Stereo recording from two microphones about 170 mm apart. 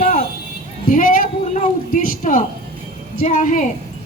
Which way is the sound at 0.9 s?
50° left (ahead or behind).